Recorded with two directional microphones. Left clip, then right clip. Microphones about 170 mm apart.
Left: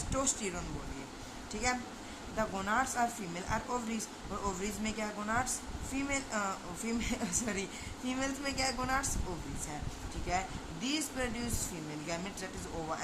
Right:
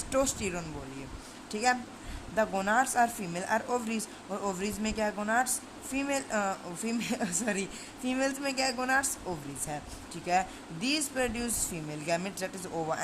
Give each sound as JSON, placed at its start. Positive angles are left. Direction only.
{"t": 0.1, "sound": "speech", "side_deg": -35}
{"t": 10.2, "sound": "speech", "side_deg": -45}